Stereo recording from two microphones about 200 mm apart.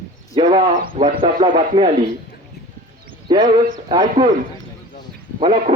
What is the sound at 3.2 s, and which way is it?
A man's voice, 25° right (ahead or behind).